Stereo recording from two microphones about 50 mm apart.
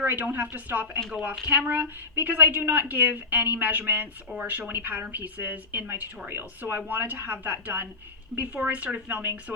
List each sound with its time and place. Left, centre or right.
0.0 s a woman's voice: right
8.4 s a woman's voice: right